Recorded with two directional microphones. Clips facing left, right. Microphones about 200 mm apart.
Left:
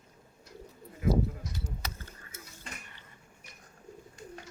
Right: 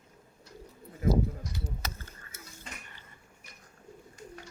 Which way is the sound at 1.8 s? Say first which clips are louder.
Right 2 dB; 45° right (ahead or behind).